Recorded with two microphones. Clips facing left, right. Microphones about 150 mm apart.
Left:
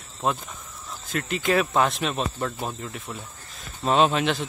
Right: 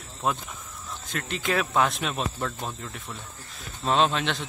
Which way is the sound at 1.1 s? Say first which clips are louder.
Left 4 dB; centre (ahead or behind).